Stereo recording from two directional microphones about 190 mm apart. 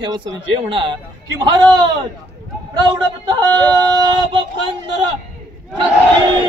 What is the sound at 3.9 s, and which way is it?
Speech, 25° right (ahead or behind).